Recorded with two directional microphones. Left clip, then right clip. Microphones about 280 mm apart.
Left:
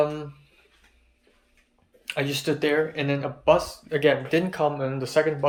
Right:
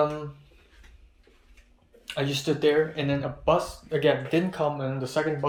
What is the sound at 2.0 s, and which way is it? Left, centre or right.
Speech, centre.